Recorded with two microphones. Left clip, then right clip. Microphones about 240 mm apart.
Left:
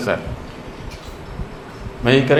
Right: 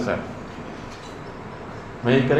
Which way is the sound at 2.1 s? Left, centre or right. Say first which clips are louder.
Left 5 dB; left.